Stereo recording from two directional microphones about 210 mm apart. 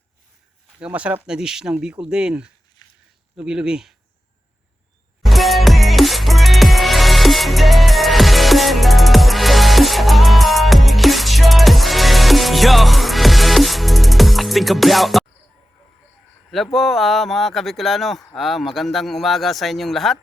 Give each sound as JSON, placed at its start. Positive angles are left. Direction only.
{"t": 0.8, "sound": "a man's voice", "side_deg": -5}
{"t": 2.8, "sound": "a sound", "side_deg": 20}
{"t": 3.3, "sound": "a man's voice", "side_deg": -5}
{"t": 5.2, "sound": "music", "side_deg": 0}
{"t": 16.7, "sound": "a man's voice", "side_deg": 0}